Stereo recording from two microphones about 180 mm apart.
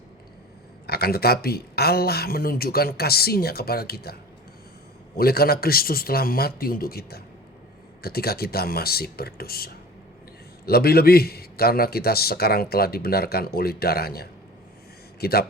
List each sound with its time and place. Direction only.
0.9 s a man's voice: 60° left (ahead or behind)